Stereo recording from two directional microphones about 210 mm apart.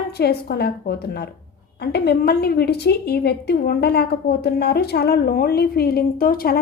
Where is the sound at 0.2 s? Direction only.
50° left (ahead or behind).